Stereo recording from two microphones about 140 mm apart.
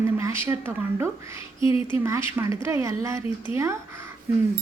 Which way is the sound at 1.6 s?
40° left (ahead or behind).